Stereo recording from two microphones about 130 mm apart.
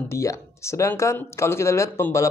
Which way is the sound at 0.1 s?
20° left (ahead or behind).